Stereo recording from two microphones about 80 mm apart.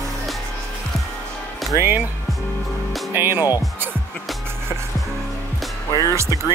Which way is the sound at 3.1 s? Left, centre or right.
Right.